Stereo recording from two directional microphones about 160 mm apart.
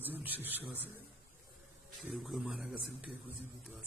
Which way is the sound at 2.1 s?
Centre (ahead or behind).